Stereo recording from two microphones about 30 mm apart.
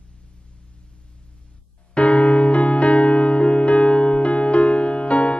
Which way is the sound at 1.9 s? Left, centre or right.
Left.